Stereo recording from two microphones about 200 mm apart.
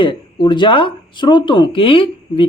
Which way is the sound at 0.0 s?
25° left (ahead or behind).